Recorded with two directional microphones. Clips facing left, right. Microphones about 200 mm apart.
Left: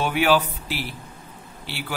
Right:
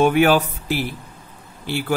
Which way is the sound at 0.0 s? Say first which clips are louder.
Right 5 dB; 50° right (ahead or behind).